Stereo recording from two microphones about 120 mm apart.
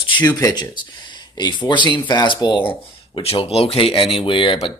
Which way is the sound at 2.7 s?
50° left (ahead or behind).